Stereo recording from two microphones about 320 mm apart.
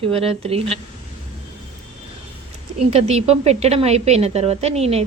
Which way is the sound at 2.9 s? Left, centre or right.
Centre.